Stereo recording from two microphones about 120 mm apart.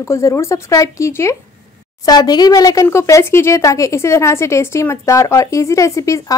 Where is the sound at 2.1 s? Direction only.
35° left (ahead or behind).